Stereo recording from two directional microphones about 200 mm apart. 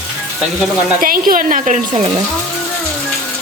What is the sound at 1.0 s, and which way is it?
A woman's voice, 45° right (ahead or behind).